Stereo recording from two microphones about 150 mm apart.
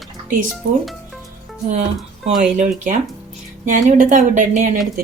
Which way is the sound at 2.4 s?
55° right (ahead or behind).